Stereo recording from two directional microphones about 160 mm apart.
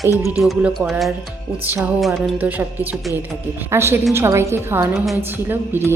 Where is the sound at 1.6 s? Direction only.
10° right (ahead or behind).